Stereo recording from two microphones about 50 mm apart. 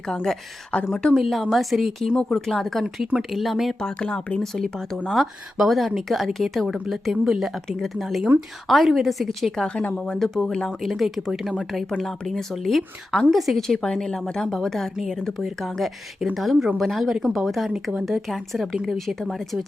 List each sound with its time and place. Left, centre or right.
0.7 s speech: left
1.1 s a woman's voice: centre
3.8 s speech: centre
4.4 s a woman's voice: centre
9.6 s speech: left
10.0 s a woman's voice: centre
10.4 s speech: centre
10.8 s a woman's voice: centre